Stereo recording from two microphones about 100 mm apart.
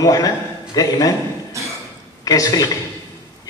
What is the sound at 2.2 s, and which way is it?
Speech, 35° left (ahead or behind).